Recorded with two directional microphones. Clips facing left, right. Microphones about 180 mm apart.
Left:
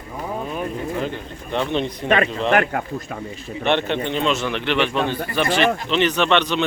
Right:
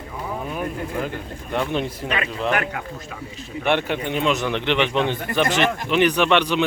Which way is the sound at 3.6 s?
10° right (ahead or behind).